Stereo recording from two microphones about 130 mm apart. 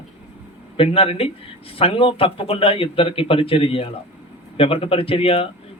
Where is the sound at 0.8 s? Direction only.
45° left (ahead or behind).